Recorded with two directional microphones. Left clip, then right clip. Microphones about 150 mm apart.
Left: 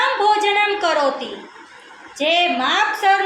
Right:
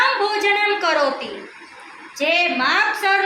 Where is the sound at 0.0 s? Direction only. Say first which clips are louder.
Left 2 dB; 45° left (ahead or behind).